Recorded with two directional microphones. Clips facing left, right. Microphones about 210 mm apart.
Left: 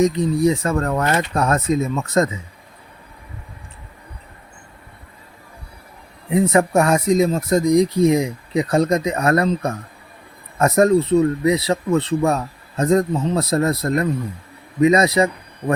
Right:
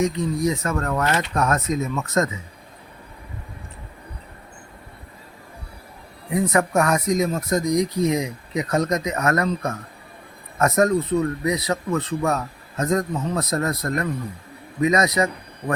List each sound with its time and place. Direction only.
0.0 s speech: 35° left (ahead or behind)
6.3 s a man's voice: 25° left (ahead or behind)